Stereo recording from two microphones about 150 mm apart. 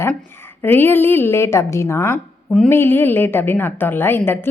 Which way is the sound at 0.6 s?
15° left (ahead or behind).